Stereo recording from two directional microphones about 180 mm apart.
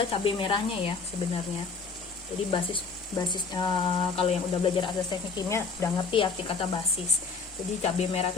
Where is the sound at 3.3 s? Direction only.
25° left (ahead or behind).